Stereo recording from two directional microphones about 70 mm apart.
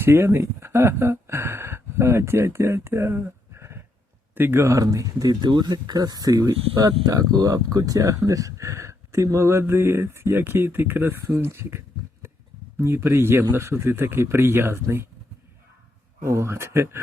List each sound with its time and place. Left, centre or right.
0.0 s speech: right
16.2 s speech: right